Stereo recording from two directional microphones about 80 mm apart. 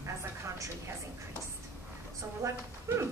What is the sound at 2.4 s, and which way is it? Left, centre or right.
Speech, right.